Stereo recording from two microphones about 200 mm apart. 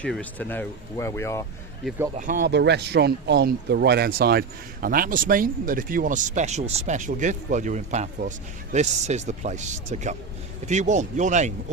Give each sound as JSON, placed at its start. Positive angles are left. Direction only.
{"t": 0.0, "sound": "speech", "side_deg": 5}
{"t": 2.1, "sound": "speech", "side_deg": -40}
{"t": 2.5, "sound": "speech", "side_deg": -60}